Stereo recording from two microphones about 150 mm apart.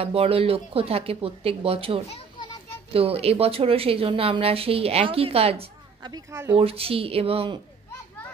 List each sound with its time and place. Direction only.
0.0 s a woman's voice: 40° right (ahead or behind)
2.0 s children playing: 35° left (ahead or behind)
2.9 s a woman's voice: 40° right (ahead or behind)
6.1 s speech: 20° right (ahead or behind)
6.5 s a woman's voice: 40° right (ahead or behind)